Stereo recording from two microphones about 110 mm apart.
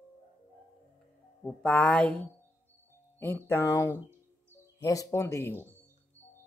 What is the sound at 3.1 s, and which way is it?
Speech, 20° left (ahead or behind).